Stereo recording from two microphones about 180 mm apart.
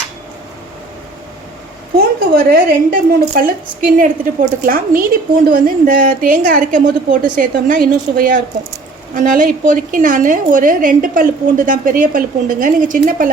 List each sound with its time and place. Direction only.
2.0 s a woman's voice: 55° right (ahead or behind)